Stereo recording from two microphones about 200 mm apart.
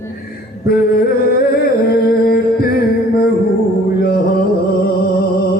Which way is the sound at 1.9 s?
50° left (ahead or behind).